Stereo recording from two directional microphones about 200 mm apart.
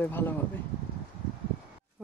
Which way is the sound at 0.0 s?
10° left (ahead or behind).